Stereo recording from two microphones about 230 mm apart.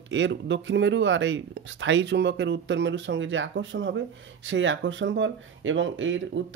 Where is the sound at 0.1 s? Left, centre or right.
Right.